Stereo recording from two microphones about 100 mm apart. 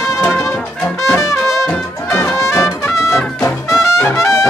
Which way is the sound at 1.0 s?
30° left (ahead or behind).